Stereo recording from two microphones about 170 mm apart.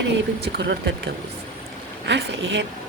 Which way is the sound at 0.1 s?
90° right.